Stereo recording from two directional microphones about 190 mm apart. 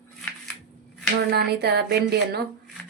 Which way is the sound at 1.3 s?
55° right (ahead or behind).